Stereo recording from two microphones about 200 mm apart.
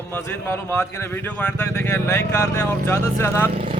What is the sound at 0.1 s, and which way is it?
Speech, 10° left (ahead or behind).